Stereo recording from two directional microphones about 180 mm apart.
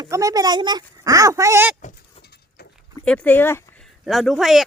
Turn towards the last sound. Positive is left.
turn(degrees=0)  # may be behind; listen again after turning